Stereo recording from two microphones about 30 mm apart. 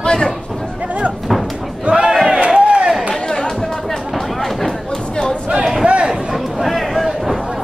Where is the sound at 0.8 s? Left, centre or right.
Right.